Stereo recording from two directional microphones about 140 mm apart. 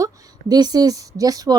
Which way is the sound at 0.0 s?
30° right (ahead or behind).